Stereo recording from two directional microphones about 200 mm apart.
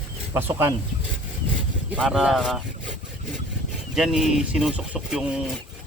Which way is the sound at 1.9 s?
5° right (ahead or behind).